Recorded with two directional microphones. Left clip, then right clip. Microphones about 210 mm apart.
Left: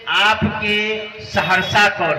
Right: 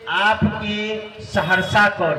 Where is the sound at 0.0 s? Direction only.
55° right (ahead or behind).